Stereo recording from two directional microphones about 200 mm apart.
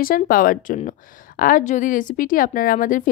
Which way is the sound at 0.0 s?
45° left (ahead or behind).